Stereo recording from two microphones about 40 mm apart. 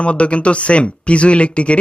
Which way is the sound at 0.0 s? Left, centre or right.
Left.